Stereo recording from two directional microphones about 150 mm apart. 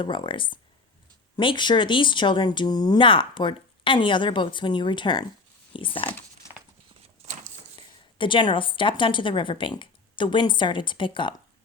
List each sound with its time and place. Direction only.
0.0 s speech: 30° left (ahead or behind)
6.1 s crumpling: 15° left (ahead or behind)
7.2 s a sound: 45° right (ahead or behind)
7.8 s a woman's voice: 35° left (ahead or behind)